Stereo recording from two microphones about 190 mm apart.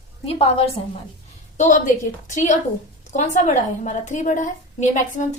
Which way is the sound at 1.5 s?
40° left (ahead or behind).